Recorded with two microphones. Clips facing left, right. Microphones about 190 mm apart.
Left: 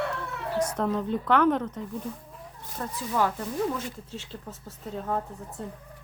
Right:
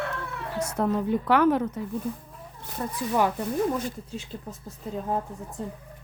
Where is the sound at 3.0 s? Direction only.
15° right (ahead or behind).